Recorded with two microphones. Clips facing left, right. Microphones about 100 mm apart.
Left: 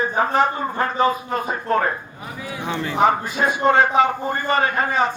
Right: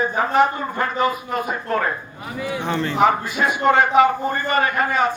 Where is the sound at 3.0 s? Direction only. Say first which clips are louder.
Left 1 dB; 30° left (ahead or behind).